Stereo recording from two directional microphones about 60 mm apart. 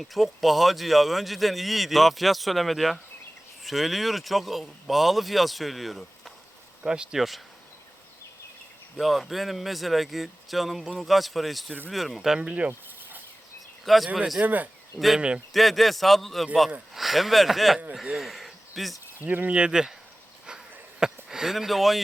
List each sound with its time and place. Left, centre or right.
0.0 s speech: centre
6.8 s speech: centre
9.0 s speech: centre
12.4 s speech: centre
13.8 s speech: centre
14.4 s speech: right
14.9 s speech: centre
18.2 s a sound: centre
19.2 s speech: right; by 19.9 s centre
21.0 s speech: centre